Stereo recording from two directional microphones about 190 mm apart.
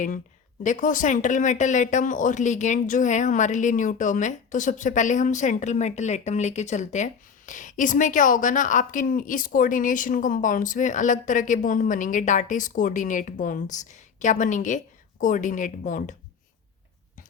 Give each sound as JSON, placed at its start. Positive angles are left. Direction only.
{"t": 0.6, "sound": "speech", "side_deg": 45}